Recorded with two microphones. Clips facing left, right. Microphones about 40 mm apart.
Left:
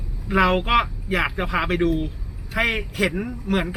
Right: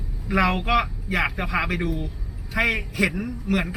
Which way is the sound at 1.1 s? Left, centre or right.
Centre.